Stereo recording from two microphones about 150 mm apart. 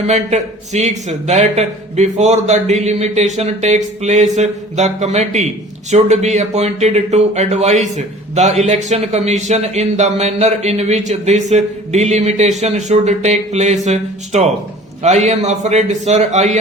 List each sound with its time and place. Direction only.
0.1 s a man's voice: 50° right (ahead or behind)